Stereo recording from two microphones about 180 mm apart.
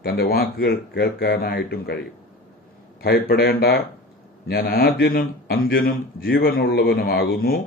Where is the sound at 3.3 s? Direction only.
60° left (ahead or behind).